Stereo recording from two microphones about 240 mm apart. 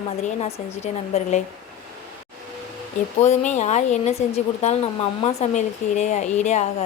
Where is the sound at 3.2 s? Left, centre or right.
Left.